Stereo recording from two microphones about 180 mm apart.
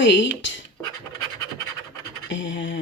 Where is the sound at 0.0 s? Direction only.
75° left (ahead or behind).